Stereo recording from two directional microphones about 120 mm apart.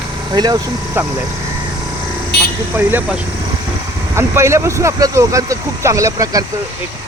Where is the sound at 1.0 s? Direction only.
15° right (ahead or behind).